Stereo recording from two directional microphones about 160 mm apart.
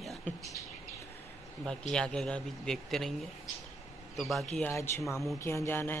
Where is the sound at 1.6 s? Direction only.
5° left (ahead or behind).